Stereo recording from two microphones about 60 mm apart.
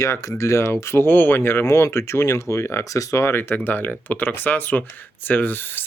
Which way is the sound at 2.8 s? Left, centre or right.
Left.